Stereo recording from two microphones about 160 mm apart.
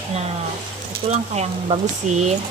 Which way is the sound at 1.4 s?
45° right (ahead or behind).